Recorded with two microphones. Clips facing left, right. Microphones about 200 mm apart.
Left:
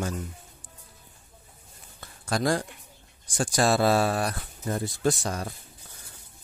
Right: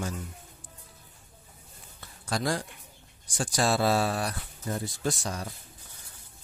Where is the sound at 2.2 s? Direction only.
50° left (ahead or behind).